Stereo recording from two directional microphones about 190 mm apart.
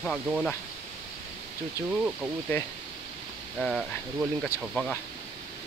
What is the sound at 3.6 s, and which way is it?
Speech, centre (ahead or behind).